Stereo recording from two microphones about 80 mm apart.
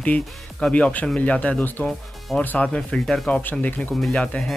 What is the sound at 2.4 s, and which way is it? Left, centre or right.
Speech, centre.